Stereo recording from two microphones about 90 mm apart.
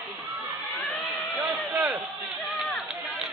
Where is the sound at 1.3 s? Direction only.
20° right (ahead or behind).